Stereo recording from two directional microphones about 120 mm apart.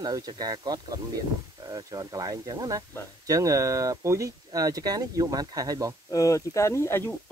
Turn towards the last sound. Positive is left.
turn(degrees=20)  # may be behind; listen again after turning